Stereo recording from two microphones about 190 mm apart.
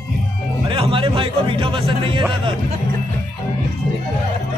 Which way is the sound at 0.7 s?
30° right (ahead or behind).